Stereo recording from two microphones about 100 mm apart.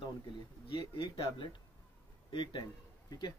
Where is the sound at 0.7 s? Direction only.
55° left (ahead or behind).